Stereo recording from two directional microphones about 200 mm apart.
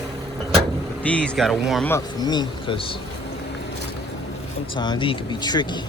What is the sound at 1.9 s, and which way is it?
Speech, 20° left (ahead or behind).